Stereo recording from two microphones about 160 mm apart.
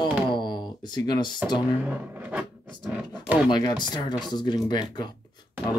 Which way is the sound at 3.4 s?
25° left (ahead or behind).